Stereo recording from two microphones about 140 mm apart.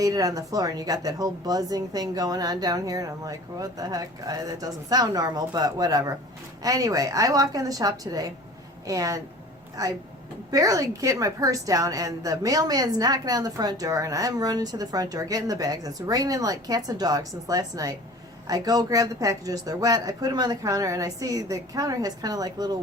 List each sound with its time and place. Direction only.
0.0 s a woman's voice: 25° right (ahead or behind)